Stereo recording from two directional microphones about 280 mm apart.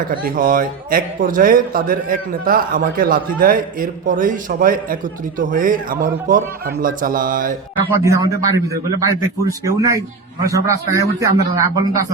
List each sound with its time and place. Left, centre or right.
0.0 s a man's voice: right
7.9 s a man's voice: centre